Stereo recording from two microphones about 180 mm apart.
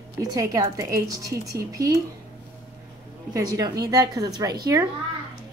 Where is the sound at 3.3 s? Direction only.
20° right (ahead or behind).